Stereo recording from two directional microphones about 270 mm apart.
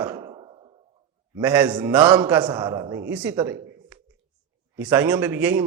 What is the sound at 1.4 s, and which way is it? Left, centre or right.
A man's voice, centre.